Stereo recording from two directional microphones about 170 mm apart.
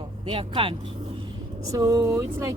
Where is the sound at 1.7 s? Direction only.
20° right (ahead or behind).